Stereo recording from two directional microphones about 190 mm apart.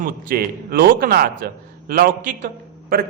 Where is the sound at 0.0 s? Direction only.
50° right (ahead or behind).